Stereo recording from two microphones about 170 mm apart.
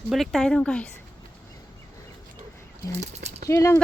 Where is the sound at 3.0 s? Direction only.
40° right (ahead or behind).